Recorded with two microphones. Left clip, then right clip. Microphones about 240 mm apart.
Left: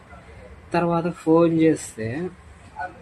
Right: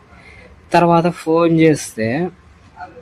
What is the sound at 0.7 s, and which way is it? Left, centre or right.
A man's voice, right.